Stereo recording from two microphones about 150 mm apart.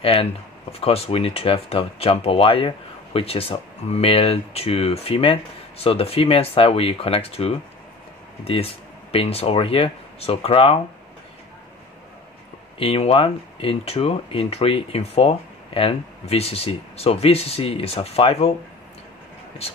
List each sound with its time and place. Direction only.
0.0 s speech: 40° left (ahead or behind)
12.7 s speech: 40° left (ahead or behind)